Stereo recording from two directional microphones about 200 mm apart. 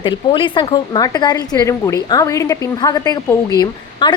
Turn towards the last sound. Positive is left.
turn(degrees=20)  # may be behind; listen again after turning